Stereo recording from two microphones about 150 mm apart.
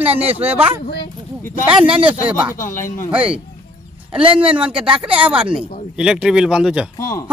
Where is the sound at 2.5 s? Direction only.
60° left (ahead or behind).